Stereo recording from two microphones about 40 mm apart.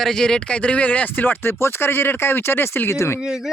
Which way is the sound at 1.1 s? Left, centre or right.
Left.